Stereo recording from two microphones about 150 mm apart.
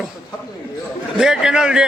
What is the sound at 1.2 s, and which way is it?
Speech, 5° right (ahead or behind).